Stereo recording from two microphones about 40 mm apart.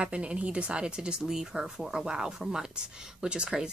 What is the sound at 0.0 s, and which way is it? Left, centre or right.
A woman's voice, right.